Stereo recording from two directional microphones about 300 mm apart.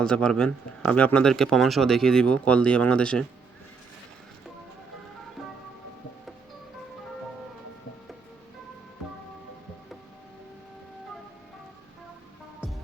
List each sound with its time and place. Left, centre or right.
0.0 s speech: centre